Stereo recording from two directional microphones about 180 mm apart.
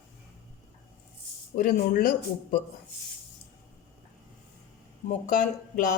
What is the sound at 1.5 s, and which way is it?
Speech, 55° left (ahead or behind).